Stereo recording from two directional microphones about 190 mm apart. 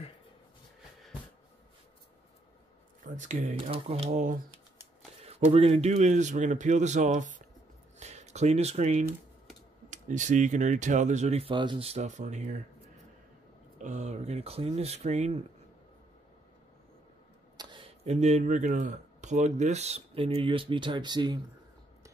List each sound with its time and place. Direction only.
3.0 s speech: 40° right (ahead or behind)
3.7 s speech: 30° right (ahead or behind)
13.7 s speech: 40° right (ahead or behind)
17.6 s speech: 25° right (ahead or behind)